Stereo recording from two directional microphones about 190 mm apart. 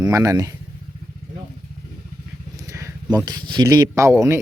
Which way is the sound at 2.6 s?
15° right (ahead or behind).